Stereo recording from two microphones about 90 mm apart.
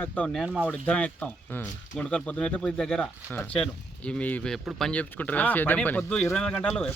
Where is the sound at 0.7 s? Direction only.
15° left (ahead or behind).